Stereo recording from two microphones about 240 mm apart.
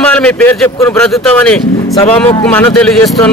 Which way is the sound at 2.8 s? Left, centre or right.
Centre.